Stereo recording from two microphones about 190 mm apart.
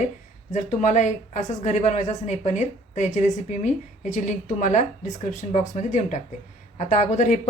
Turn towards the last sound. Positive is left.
turn(degrees=40)  # may be behind; listen again after turning